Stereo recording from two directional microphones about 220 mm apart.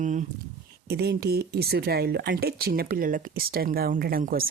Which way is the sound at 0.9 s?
45° right (ahead or behind).